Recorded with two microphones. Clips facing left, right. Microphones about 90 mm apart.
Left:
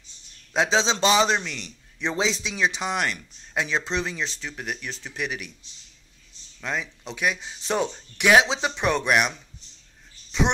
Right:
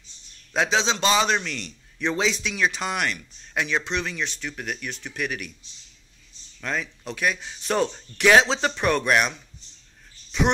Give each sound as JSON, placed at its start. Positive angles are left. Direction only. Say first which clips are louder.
{"t": 0.5, "sound": "a man's voice", "louder": "left 1 dB", "side_deg": 25}
{"t": 5.2, "sound": "a man's voice", "louder": "right 1 dB", "side_deg": 20}
{"t": 6.6, "sound": "speech", "louder": "right 1 dB", "side_deg": 20}